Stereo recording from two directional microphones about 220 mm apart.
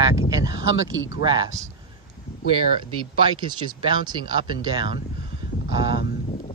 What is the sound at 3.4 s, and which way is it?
Speech, 20° right (ahead or behind).